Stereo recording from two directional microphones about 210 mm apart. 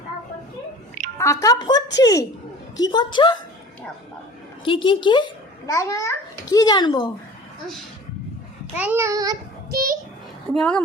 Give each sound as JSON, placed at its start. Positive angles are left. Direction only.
{"t": 1.2, "sound": "a woman's voice", "side_deg": 15}
{"t": 4.6, "sound": "a child's voice", "side_deg": 25}
{"t": 8.7, "sound": "a child's voice", "side_deg": -10}
{"t": 9.7, "sound": "a child's voice", "side_deg": -45}
{"t": 10.5, "sound": "speech", "side_deg": 5}